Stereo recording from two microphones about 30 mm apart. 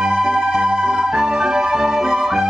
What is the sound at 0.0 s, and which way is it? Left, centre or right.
Music, right.